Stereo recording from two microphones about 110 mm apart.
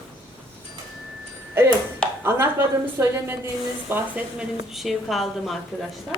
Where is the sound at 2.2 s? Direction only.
20° right (ahead or behind).